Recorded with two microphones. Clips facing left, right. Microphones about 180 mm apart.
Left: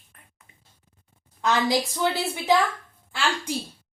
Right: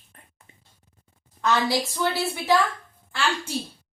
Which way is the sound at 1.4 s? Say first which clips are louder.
Even; 20° left (ahead or behind).